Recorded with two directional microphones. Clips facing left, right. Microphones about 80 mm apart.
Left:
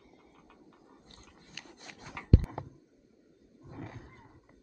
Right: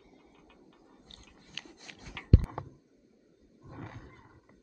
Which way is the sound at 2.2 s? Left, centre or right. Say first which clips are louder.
Left 3 dB; centre.